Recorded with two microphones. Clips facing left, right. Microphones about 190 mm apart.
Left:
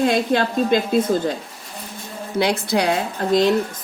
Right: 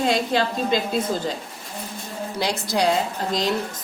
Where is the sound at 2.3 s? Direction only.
60° left (ahead or behind).